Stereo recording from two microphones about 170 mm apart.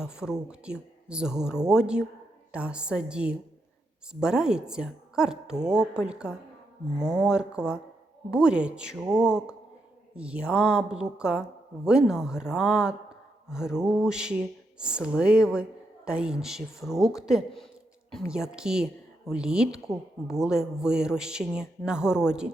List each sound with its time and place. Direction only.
0.0 s a woman's voice: 5° right (ahead or behind)
6.9 s speech: 20° right (ahead or behind)
7.2 s speech: 5° right (ahead or behind)